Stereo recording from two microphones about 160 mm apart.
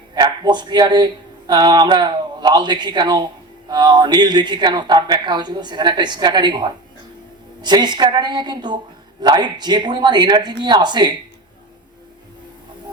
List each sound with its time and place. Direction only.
0.1 s a man's voice: 25° right (ahead or behind)